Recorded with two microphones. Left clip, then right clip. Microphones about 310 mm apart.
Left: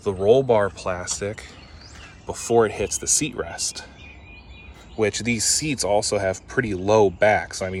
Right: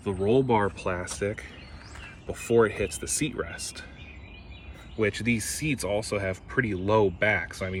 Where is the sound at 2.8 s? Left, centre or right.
Left.